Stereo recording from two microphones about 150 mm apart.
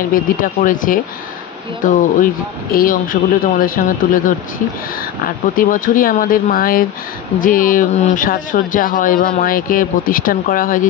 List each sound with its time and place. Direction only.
0.1 s speech: 65° left (ahead or behind)
5.6 s speech: 70° left (ahead or behind)